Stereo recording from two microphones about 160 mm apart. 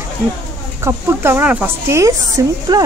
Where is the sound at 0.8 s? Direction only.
15° right (ahead or behind).